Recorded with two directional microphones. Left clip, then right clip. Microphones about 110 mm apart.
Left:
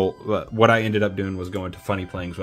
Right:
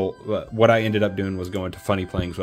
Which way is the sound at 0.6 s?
15° left (ahead or behind).